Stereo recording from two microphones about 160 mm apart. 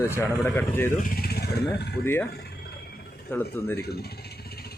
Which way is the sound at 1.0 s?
70° left (ahead or behind).